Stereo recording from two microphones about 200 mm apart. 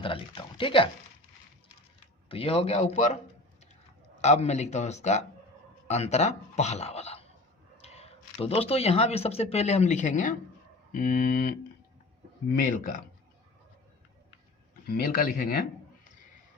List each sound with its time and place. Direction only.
0.0 s speech: 25° left (ahead or behind)
2.3 s speech: 30° left (ahead or behind)
4.2 s speech: 35° left (ahead or behind)
12.5 s speech: 45° left (ahead or behind)
14.8 s speech: 50° left (ahead or behind)